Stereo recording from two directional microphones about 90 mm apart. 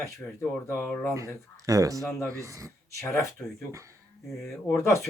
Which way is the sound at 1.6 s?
40° right (ahead or behind).